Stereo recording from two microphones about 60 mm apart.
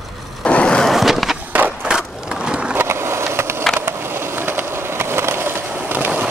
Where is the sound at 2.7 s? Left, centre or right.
Right.